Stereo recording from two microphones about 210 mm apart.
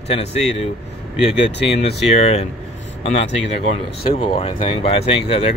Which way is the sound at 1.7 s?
30° left (ahead or behind).